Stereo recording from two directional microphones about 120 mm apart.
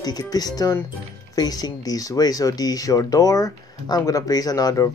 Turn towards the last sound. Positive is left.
turn(degrees=30)  # may be behind; listen again after turning